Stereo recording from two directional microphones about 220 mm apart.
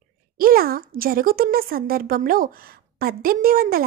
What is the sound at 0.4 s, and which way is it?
A woman's voice, 45° right (ahead or behind).